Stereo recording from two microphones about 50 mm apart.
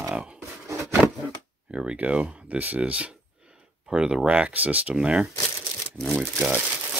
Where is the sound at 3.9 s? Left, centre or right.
Centre.